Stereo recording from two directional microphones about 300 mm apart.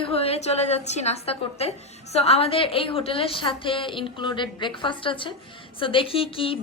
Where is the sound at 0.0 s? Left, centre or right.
Centre.